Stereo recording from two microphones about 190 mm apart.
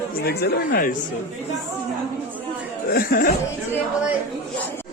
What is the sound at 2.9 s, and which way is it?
Speech, 50° left (ahead or behind).